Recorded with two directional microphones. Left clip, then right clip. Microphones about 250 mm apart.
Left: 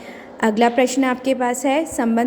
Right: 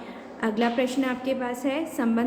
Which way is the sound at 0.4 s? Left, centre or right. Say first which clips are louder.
Left 9 dB; left.